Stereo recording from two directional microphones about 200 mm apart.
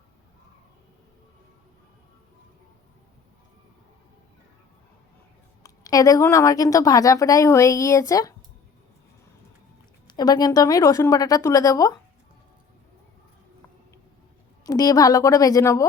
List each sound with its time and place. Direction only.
5.6 s a woman's voice: 15° left (ahead or behind)
10.2 s a woman's voice: 20° left (ahead or behind)
14.6 s a woman's voice: 20° left (ahead or behind)